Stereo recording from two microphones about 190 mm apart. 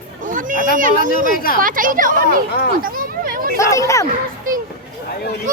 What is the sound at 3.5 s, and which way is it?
Speech, 15° left (ahead or behind).